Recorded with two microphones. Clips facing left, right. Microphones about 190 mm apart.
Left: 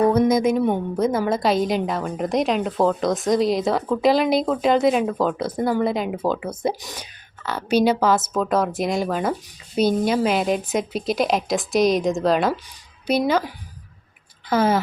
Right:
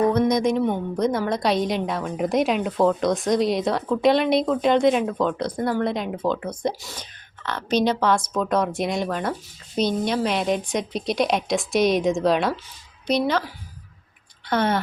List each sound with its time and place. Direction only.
0.1 s a woman's voice: 5° left (ahead or behind)